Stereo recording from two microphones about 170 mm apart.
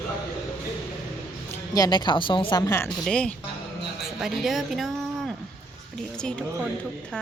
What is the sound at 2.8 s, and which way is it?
Speech, 5° left (ahead or behind).